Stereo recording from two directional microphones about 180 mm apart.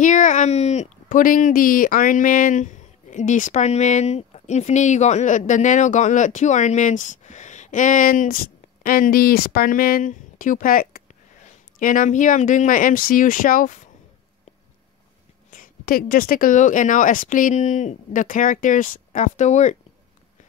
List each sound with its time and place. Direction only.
0.0 s a woman's voice: 45° left (ahead or behind)
15.5 s a woman's voice: 50° left (ahead or behind)